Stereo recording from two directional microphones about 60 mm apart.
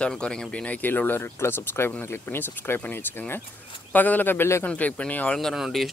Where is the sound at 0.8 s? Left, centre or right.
Left.